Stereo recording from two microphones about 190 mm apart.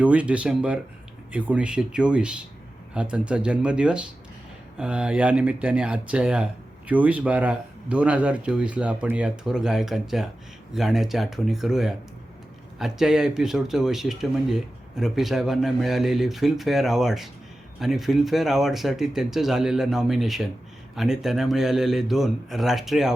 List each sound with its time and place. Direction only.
0.0 s speech: 5° right (ahead or behind)